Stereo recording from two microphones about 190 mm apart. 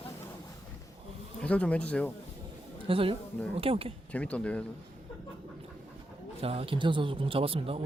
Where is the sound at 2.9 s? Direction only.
30° right (ahead or behind).